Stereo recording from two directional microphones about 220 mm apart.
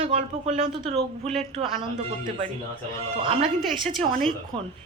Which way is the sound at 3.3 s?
25° right (ahead or behind).